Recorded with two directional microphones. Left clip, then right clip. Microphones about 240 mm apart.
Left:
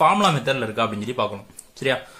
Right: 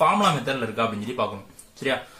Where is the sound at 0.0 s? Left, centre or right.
Left.